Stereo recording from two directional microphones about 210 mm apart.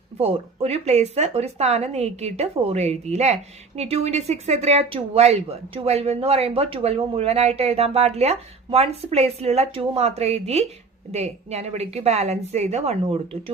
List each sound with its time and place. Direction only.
0.2 s speech: 30° right (ahead or behind)